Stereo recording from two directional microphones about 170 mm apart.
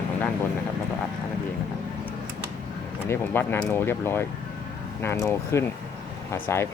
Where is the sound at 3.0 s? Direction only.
15° left (ahead or behind).